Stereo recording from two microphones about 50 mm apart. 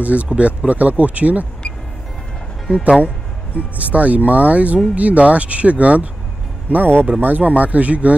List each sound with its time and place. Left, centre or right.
0.0 s speech: right
3.7 s speech: right
6.7 s speech: right